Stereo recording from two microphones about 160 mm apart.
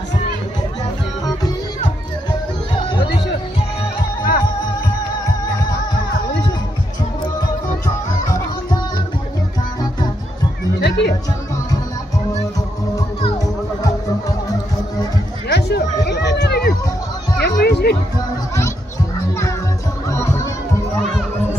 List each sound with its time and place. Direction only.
2.7 s music: 30° left (ahead or behind)
7.8 s music: 25° left (ahead or behind)
10.8 s music: 90° left
15.4 s a sound: 90° left
17.4 s children playing: 90° left
20.1 s music: 20° left (ahead or behind)